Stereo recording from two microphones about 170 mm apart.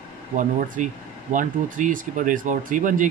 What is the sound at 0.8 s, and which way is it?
Speech, 50° right (ahead or behind).